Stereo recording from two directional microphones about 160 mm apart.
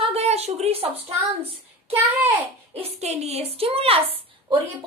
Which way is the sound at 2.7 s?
40° right (ahead or behind).